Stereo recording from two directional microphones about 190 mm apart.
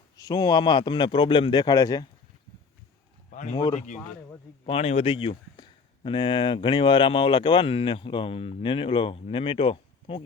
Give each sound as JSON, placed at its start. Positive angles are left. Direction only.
{"t": 0.2, "sound": "speech", "side_deg": 20}
{"t": 3.3, "sound": "speech", "side_deg": 40}